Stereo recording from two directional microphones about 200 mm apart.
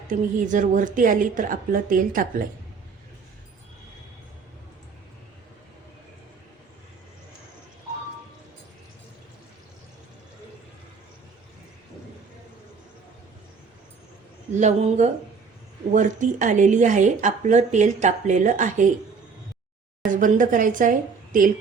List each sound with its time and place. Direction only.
0.1 s speech: 40° right (ahead or behind)
14.5 s speech: 35° right (ahead or behind)
20.1 s a woman's voice: 40° right (ahead or behind)